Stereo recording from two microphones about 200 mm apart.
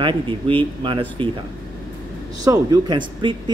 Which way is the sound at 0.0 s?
25° right (ahead or behind).